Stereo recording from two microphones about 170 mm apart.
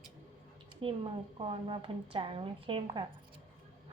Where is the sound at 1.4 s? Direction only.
30° right (ahead or behind).